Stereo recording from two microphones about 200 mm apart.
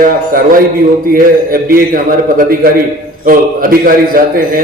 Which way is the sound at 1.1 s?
45° right (ahead or behind).